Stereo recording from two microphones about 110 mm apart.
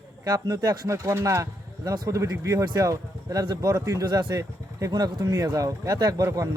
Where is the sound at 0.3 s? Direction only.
35° right (ahead or behind).